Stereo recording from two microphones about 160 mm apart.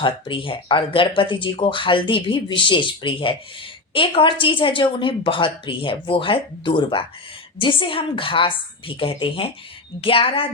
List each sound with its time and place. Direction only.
0.0 s speech: 30° left (ahead or behind)